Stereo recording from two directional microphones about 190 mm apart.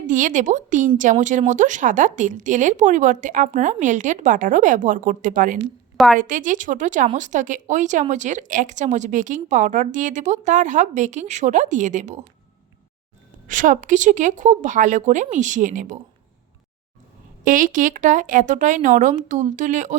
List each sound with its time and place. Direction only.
0.1 s a woman's voice: 40° right (ahead or behind)
13.5 s a woman's voice: 45° right (ahead or behind)
17.4 s a woman's voice: 45° right (ahead or behind)